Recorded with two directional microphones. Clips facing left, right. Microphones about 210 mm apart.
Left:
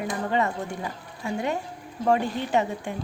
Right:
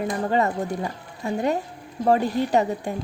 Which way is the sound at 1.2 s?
40° right (ahead or behind).